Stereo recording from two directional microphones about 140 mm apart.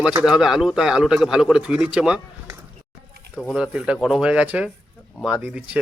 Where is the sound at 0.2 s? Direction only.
5° right (ahead or behind).